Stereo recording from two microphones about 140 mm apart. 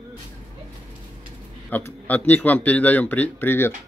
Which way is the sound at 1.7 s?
10° left (ahead or behind).